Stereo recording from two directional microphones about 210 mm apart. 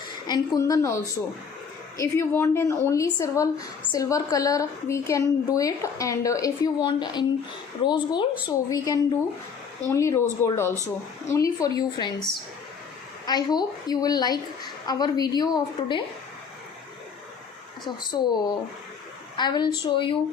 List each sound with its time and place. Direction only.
0.3 s a woman's voice: 15° left (ahead or behind)
13.2 s a woman's voice: 20° left (ahead or behind)
17.8 s a woman's voice: 20° left (ahead or behind)